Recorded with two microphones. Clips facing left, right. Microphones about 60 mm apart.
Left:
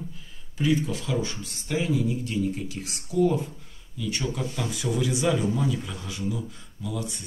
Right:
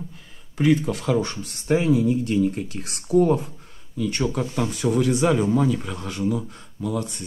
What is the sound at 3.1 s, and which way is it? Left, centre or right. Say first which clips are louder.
Speech: right 5 dB; right.